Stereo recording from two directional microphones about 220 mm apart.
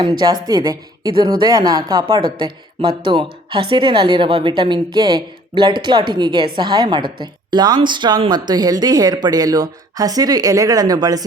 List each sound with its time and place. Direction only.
0.0 s a woman's voice: 20° right (ahead or behind)